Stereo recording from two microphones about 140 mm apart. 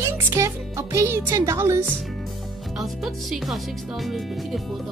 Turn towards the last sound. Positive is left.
turn(degrees=0)  # may be behind; listen again after turning